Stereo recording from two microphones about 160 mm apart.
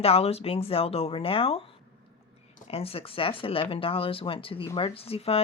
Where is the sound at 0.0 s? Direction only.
40° left (ahead or behind).